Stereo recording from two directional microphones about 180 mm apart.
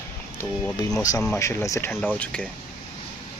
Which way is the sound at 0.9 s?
20° left (ahead or behind).